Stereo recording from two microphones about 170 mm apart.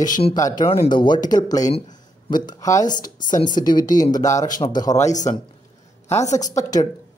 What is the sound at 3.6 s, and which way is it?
Speech, 25° left (ahead or behind).